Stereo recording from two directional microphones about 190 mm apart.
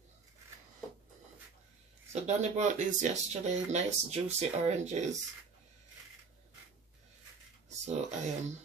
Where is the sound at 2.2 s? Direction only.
40° right (ahead or behind).